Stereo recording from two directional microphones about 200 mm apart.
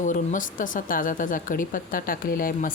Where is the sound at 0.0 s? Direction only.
40° left (ahead or behind).